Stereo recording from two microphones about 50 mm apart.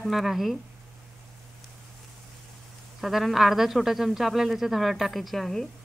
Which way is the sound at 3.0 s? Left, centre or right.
Centre.